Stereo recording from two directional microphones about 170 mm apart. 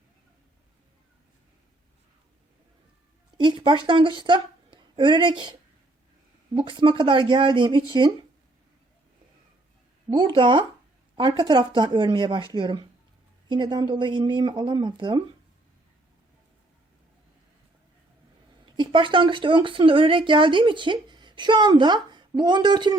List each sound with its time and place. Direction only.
3.3 s a woman's voice: 25° right (ahead or behind)
6.6 s speech: 30° right (ahead or behind)
10.1 s speech: 30° right (ahead or behind)
18.6 s speech: 30° right (ahead or behind)